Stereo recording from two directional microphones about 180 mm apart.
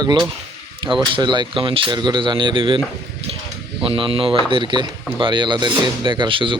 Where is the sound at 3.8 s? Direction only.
30° right (ahead or behind).